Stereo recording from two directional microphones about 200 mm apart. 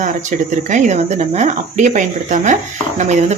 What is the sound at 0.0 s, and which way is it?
Speech, 40° right (ahead or behind).